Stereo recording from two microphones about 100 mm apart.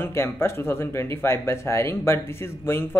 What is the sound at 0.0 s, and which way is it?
Speech, 25° left (ahead or behind).